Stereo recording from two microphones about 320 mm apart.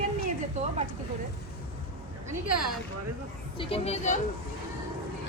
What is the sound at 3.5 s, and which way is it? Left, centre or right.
Speech, centre.